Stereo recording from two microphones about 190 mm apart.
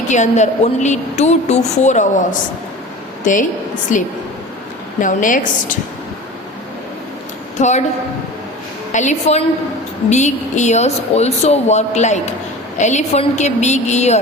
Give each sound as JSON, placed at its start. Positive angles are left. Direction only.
{"t": 0.1, "sound": "a woman's voice", "side_deg": 40}
{"t": 3.9, "sound": "a woman's voice", "side_deg": 40}
{"t": 7.6, "sound": "a woman's voice", "side_deg": 40}
{"t": 8.9, "sound": "a woman's voice", "side_deg": 40}